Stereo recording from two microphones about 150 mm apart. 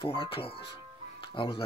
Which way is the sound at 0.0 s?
35° left (ahead or behind).